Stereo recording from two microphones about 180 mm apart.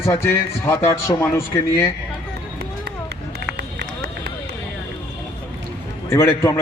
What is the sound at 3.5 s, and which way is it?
Run, 70° right (ahead or behind).